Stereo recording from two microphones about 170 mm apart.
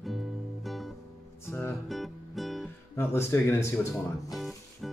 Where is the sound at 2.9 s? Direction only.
15° left (ahead or behind).